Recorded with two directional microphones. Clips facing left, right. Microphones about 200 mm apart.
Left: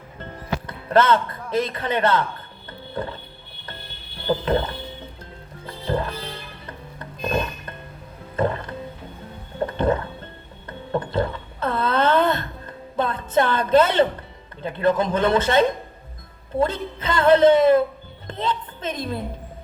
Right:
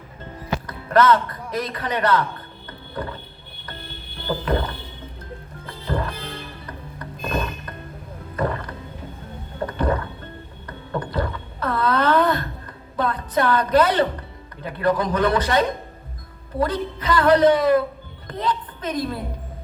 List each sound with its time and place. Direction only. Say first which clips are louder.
0.7 s speech: right 1 dB; 25° left (ahead or behind)
2.9 s vehicle: left 1 dB; 25° left (ahead or behind)
4.4 s speech: even; 25° left (ahead or behind)
5.9 s music: left 1 dB; 25° left (ahead or behind)
8.4 s a sound: left 2 dB; 25° left (ahead or behind)
9.7 s rowboat: left 2 dB; 25° left (ahead or behind)
10.7 s a sound: left 3 dB; 25° left (ahead or behind)
14.6 s a woman's voice: left 1 dB; 25° left (ahead or behind)